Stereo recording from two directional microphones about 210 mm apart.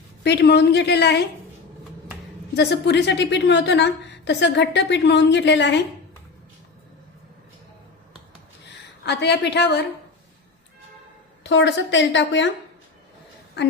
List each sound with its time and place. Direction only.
0.2 s a woman's voice: 55° left (ahead or behind)
2.6 s a woman's voice: 55° left (ahead or behind)
9.0 s a woman's voice: 55° left (ahead or behind)
11.4 s a woman's voice: 60° left (ahead or behind)